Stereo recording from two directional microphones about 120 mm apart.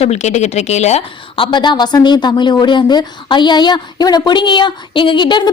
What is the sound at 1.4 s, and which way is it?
Speech, 40° left (ahead or behind).